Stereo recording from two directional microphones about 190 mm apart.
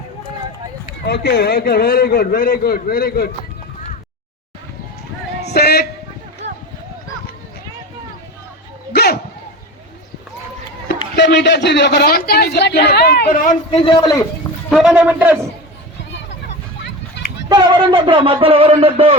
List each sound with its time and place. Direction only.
1.0 s a man's voice: 55° left (ahead or behind)
5.4 s a sound: 60° left (ahead or behind)
8.9 s bow-wow: 55° left (ahead or behind)
11.2 s speech: 65° left (ahead or behind); by 13.6 s 45° left (ahead or behind)
13.8 s a man's voice: 25° left (ahead or behind)
14.7 s a man's voice: centre (ahead or behind)
17.5 s speech: 25° right (ahead or behind)